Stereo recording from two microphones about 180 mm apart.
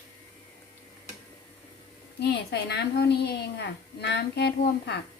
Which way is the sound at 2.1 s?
70° left (ahead or behind).